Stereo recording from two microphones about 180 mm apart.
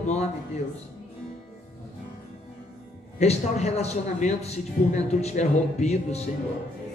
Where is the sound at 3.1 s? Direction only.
35° left (ahead or behind).